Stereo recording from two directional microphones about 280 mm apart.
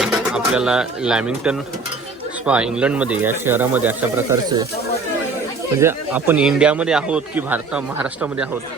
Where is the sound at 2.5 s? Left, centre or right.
Centre.